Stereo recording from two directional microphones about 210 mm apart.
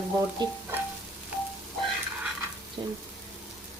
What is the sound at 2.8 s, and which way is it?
Speech, 20° right (ahead or behind).